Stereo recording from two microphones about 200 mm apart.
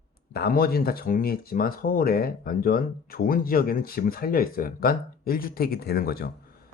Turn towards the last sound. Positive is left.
turn(degrees=50)  # may be behind; listen again after turning